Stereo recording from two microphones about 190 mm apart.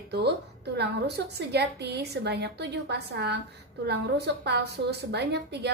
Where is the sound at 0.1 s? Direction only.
60° right (ahead or behind).